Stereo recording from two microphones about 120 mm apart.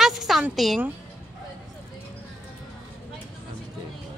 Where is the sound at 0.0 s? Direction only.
5° right (ahead or behind).